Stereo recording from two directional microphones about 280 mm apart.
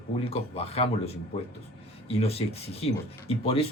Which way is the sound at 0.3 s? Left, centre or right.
Left.